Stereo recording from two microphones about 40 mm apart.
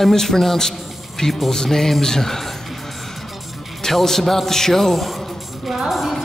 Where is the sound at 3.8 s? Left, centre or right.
Centre.